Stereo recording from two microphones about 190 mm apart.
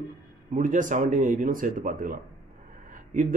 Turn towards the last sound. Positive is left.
turn(degrees=-45)  # may be behind; listen again after turning